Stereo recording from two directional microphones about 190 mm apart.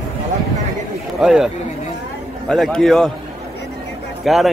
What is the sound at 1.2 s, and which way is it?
Speech, centre (ahead or behind).